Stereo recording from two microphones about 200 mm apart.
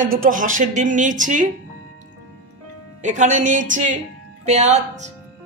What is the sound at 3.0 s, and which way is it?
Speech, 35° right (ahead or behind).